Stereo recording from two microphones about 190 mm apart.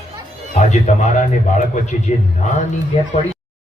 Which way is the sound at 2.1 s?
40° left (ahead or behind).